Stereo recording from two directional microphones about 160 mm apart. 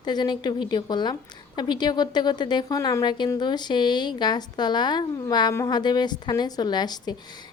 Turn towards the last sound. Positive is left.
turn(degrees=25)  # may be behind; listen again after turning